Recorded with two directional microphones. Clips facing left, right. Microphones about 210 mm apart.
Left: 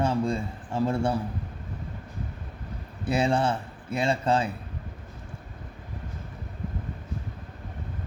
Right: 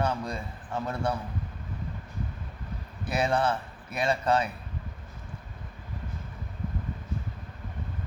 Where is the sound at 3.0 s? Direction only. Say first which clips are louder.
Left 2 dB; 30° left (ahead or behind).